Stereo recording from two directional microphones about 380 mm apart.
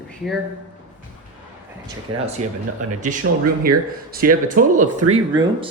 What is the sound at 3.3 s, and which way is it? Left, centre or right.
Speech, right.